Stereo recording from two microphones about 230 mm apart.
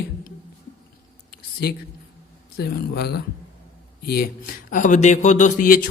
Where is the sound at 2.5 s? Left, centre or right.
Left.